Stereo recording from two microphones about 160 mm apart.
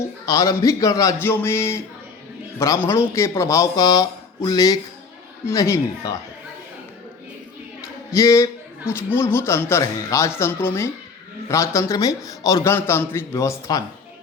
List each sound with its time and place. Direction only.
0.3 s speech: 20° left (ahead or behind)
8.1 s a man's voice: 20° left (ahead or behind)